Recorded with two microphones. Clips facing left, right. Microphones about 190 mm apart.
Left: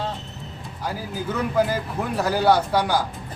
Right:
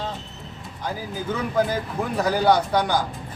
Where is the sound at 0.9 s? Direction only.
5° left (ahead or behind).